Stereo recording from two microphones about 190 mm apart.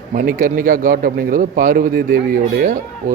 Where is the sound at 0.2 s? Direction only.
50° right (ahead or behind).